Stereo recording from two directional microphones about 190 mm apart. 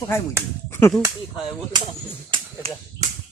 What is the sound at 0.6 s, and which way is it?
Finger snapping, 15° left (ahead or behind).